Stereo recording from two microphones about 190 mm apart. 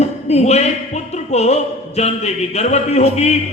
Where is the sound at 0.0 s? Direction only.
35° left (ahead or behind).